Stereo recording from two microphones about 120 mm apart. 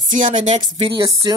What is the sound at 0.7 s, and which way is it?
Speech, 40° right (ahead or behind).